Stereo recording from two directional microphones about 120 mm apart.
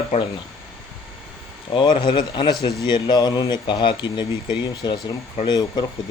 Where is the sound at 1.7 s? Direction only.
40° left (ahead or behind).